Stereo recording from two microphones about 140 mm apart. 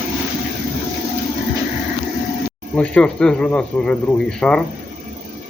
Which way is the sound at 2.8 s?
5° left (ahead or behind).